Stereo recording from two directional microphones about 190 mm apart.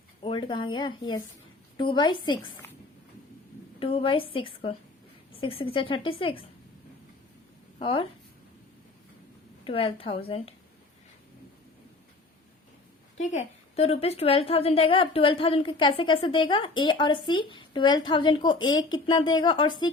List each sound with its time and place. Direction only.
0.2 s a woman's voice: 25° left (ahead or behind)
3.8 s a woman's voice: 30° left (ahead or behind)
7.8 s speech: 30° left (ahead or behind)
9.6 s a woman's voice: 30° left (ahead or behind)
13.1 s a woman's voice: 35° left (ahead or behind)